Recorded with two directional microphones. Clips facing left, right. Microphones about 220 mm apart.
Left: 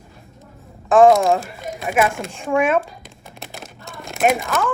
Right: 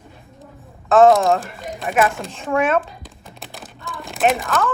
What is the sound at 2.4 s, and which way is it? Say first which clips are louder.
Speech: left 1 dB; 15° left (ahead or behind).